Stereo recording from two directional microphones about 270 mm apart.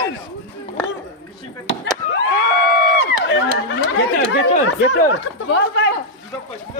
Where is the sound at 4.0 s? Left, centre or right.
Left.